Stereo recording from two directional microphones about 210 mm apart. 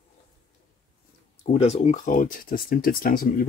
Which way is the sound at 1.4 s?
30° left (ahead or behind).